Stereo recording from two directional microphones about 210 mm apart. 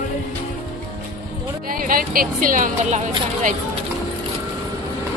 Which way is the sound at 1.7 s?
40° right (ahead or behind).